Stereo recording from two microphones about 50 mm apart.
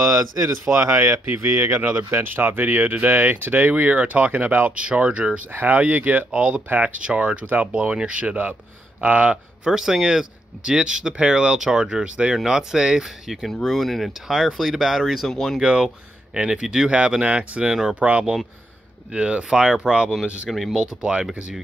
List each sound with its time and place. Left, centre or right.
0.0 s speech: right
4.7 s speech: right
7.4 s speech: right
7.7 s speech: centre
9.7 s speech: centre
13.5 s speech: centre
15.2 s speech: centre
15.6 s speech: centre
20.4 s speech: centre
21.0 s speech: right